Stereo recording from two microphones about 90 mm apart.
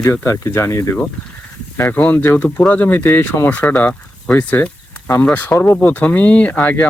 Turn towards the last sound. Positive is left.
turn(degrees=15)  # may be behind; listen again after turning